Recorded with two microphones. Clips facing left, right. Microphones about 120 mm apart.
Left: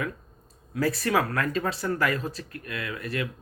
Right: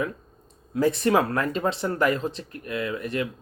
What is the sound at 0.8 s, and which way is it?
Speech, 25° right (ahead or behind).